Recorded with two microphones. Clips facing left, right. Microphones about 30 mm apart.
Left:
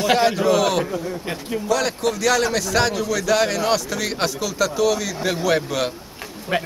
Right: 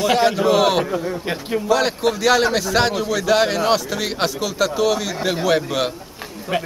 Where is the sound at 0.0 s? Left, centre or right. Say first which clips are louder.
Right 1 dB; centre.